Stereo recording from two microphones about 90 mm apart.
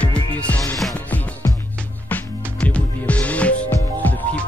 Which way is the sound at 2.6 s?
15° left (ahead or behind).